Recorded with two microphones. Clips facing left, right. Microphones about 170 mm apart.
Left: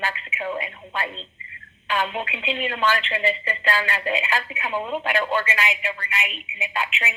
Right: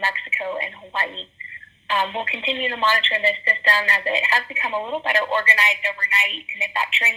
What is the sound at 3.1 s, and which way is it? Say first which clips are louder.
Speech: right 1 dB; 40° right (ahead or behind).